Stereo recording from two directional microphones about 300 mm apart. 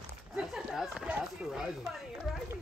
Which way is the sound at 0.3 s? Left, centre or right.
Centre.